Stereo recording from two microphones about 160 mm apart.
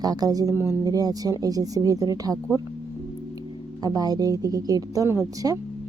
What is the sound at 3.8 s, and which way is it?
Speech, 25° right (ahead or behind).